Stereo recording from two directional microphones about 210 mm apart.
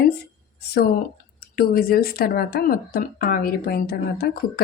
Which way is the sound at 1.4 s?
45° left (ahead or behind).